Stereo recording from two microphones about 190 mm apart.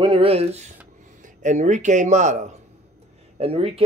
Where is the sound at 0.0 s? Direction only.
30° right (ahead or behind).